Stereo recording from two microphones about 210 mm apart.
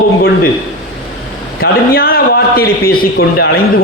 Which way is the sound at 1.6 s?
45° left (ahead or behind).